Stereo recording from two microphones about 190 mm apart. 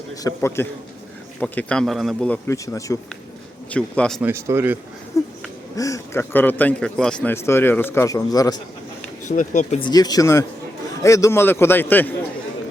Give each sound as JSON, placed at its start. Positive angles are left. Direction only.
{"t": 0.2, "sound": "a man's voice", "side_deg": 15}
{"t": 3.7, "sound": "a man's voice", "side_deg": 5}
{"t": 4.2, "sound": "speech", "side_deg": -10}
{"t": 5.2, "sound": "a man's voice", "side_deg": 15}
{"t": 9.2, "sound": "speech", "side_deg": 40}
{"t": 9.8, "sound": "a man's voice", "side_deg": 20}